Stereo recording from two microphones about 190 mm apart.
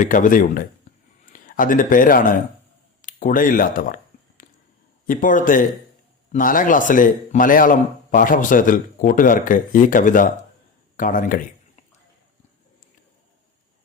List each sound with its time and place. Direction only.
0.0 s a man's voice: 45° left (ahead or behind)
3.0 s a sound: 45° left (ahead or behind)
5.0 s a man's voice: 45° left (ahead or behind)